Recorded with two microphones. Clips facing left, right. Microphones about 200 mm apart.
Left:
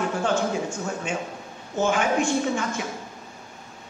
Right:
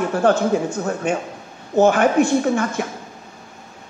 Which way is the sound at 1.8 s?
60° right (ahead or behind).